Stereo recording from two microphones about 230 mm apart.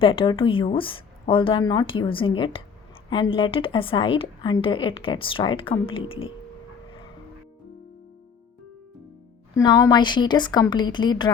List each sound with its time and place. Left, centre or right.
0.0 s a woman's voice: left
9.6 s a woman's voice: centre